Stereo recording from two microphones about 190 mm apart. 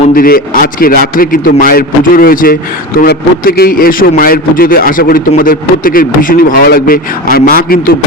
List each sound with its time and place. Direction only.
0.2 s speech: 50° left (ahead or behind)